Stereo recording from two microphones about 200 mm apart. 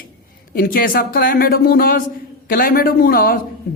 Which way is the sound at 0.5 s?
45° left (ahead or behind).